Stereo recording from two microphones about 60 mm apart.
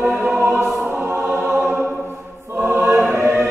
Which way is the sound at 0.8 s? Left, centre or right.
Right.